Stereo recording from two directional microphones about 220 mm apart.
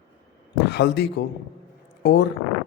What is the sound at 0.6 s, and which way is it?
A man's voice, 50° left (ahead or behind).